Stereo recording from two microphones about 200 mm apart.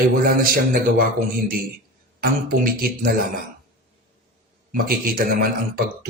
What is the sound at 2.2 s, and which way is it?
A man's voice, 50° right (ahead or behind).